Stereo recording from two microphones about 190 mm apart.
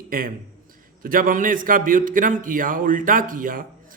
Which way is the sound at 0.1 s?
50° right (ahead or behind).